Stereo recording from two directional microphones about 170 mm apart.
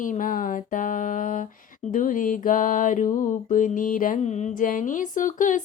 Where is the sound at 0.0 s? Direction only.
50° left (ahead or behind).